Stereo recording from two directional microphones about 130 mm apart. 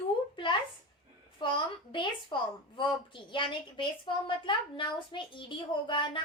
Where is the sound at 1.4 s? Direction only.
40° left (ahead or behind).